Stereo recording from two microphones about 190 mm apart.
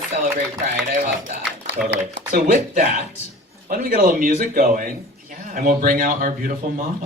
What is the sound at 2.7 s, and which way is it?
Speech, 35° right (ahead or behind).